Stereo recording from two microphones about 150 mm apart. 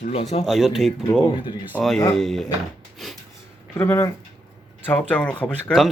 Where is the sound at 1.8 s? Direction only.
5° left (ahead or behind).